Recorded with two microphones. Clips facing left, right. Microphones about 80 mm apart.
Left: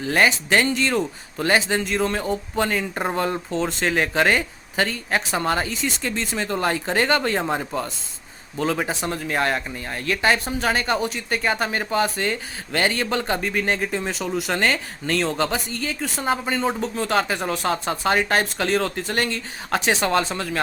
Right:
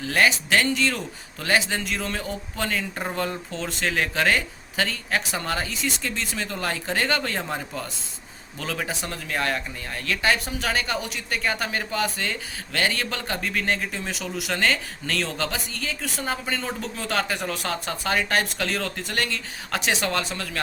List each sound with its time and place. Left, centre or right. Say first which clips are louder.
0.0 s speech: left 2 dB; left
8.5 s speech: left 6 dB; left
13.9 s speech: left 6 dB; left